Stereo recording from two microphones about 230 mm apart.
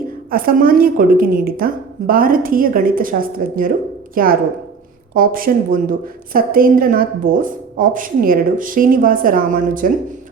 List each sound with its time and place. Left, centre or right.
0.3 s a woman's voice: right